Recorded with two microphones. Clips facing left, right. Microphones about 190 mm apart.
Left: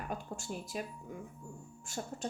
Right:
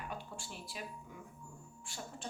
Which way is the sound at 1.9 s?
45° left (ahead or behind).